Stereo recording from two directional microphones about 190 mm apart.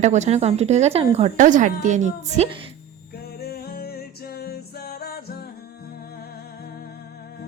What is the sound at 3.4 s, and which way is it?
Music, 55° left (ahead or behind).